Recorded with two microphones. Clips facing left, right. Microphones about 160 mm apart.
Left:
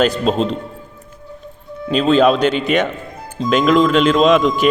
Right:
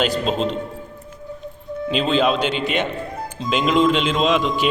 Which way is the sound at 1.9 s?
45° left (ahead or behind).